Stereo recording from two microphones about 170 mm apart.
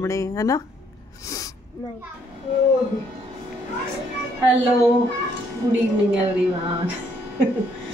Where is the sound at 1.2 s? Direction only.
20° left (ahead or behind).